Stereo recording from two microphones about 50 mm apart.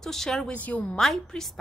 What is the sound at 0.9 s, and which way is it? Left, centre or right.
Speech, centre.